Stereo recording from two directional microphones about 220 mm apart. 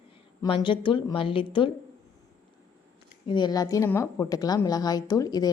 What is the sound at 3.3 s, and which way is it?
A woman's voice, 20° left (ahead or behind).